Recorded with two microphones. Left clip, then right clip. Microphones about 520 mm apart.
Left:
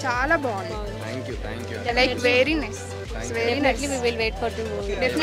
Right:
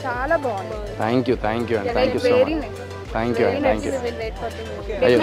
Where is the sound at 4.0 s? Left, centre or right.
Left.